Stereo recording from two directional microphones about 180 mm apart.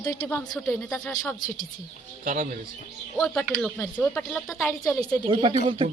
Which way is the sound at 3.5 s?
5° left (ahead or behind).